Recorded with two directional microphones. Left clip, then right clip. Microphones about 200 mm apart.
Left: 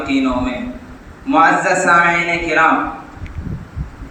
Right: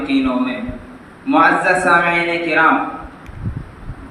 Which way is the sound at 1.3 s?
20° left (ahead or behind).